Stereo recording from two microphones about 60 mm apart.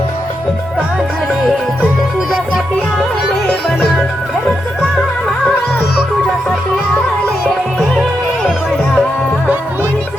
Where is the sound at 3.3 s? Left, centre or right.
Centre.